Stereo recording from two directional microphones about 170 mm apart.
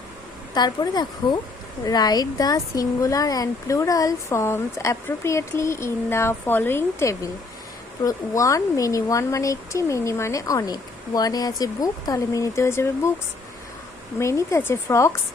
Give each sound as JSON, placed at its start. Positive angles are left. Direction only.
{"t": 0.5, "sound": "speech", "side_deg": 25}
{"t": 14.2, "sound": "speech", "side_deg": 15}